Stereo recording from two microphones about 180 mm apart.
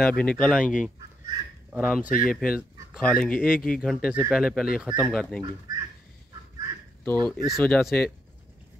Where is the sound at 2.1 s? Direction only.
50° left (ahead or behind).